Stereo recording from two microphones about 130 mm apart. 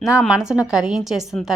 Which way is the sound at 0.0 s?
5° right (ahead or behind).